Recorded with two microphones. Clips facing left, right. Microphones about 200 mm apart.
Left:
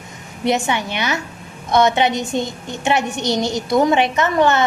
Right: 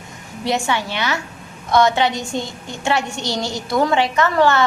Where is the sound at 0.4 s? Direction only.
20° left (ahead or behind).